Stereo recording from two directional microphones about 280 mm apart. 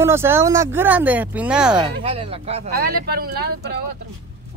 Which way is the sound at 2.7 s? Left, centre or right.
Right.